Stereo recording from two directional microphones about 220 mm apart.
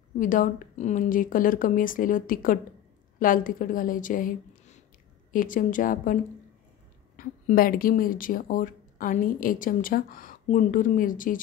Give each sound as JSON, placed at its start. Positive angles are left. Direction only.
{"t": 0.2, "sound": "a woman's voice", "side_deg": 40}
{"t": 7.2, "sound": "speech", "side_deg": 40}